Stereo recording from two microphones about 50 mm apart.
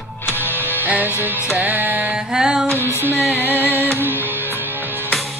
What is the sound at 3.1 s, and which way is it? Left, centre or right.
Music, left.